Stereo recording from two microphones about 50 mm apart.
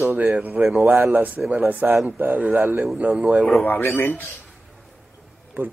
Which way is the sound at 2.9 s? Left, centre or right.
Right.